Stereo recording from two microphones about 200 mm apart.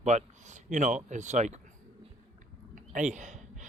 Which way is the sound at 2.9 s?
35° right (ahead or behind).